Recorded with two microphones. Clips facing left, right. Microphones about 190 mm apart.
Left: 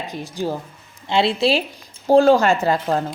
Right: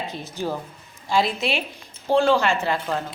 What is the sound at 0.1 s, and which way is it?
Speech, 15° left (ahead or behind).